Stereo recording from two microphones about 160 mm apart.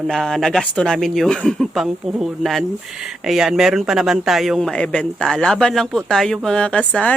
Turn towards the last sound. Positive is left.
turn(degrees=5)  # may be behind; listen again after turning